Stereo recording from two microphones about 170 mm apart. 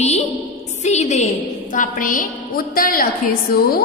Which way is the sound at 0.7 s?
45° left (ahead or behind).